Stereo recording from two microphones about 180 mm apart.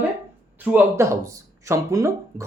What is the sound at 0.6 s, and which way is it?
Speech, 10° right (ahead or behind).